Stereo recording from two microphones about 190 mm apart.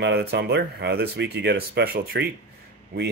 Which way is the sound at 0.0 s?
60° right (ahead or behind).